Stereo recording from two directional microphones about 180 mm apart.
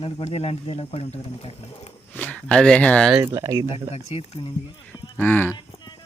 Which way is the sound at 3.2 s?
15° right (ahead or behind).